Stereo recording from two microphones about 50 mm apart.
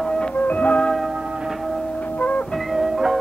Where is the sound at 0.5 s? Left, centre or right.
Left.